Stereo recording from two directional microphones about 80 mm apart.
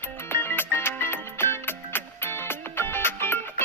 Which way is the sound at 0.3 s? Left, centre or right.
Left.